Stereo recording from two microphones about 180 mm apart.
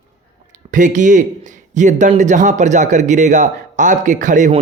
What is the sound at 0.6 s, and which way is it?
A man's voice, 45° right (ahead or behind).